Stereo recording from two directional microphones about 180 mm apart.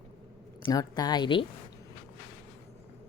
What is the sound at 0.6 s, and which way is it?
Speech, 20° left (ahead or behind).